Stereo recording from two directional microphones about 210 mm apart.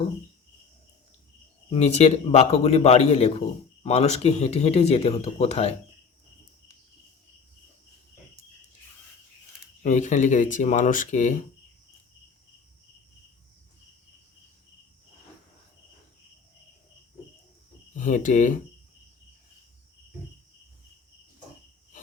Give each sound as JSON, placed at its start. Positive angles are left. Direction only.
{"t": 1.7, "sound": "speech", "side_deg": 30}
{"t": 9.8, "sound": "speech", "side_deg": 35}
{"t": 17.9, "sound": "speech", "side_deg": 40}